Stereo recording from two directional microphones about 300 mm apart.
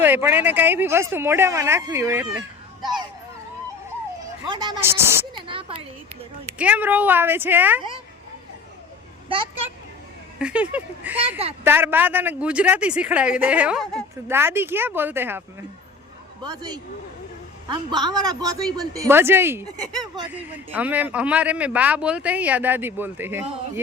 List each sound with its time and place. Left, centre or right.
0.0 s speech: centre
4.4 s speech: centre
5.5 s a sound: centre
6.6 s a man's voice: centre
10.3 s a man's voice: centre